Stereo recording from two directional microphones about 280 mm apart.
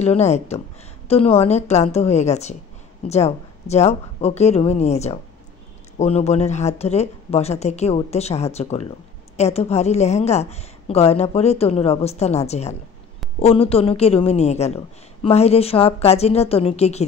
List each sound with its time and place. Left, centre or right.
0.0 s a woman's voice: left